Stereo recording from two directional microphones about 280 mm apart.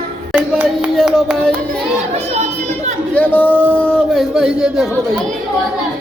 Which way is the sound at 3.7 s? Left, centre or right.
Centre.